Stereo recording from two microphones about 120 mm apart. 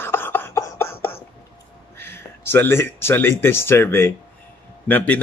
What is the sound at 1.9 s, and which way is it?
A man's voice, 20° left (ahead or behind).